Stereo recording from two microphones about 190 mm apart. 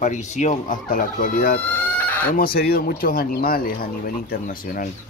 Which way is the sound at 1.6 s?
10° left (ahead or behind).